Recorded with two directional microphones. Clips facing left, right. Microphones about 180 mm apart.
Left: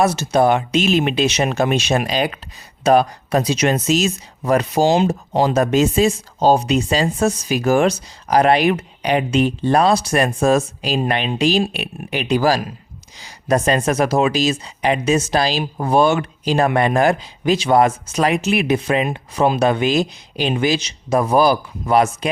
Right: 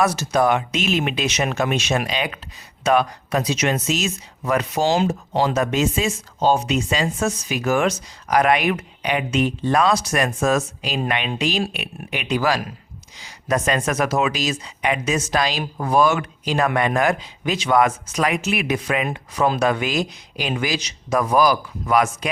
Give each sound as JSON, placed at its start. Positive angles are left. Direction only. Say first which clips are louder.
{"t": 0.0, "sound": "speech", "louder": "left 3 dB", "side_deg": 30}